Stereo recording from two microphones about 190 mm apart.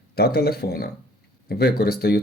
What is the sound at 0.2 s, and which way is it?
Speech, 55° left (ahead or behind).